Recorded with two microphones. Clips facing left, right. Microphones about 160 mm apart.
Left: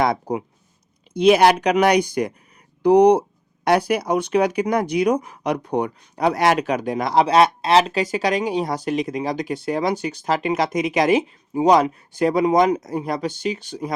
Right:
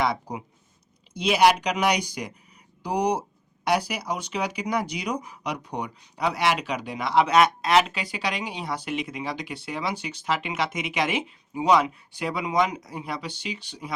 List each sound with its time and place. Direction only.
0.0 s speech: 50° left (ahead or behind)